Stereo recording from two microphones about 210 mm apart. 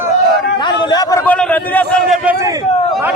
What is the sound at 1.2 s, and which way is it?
Speech, 5° left (ahead or behind).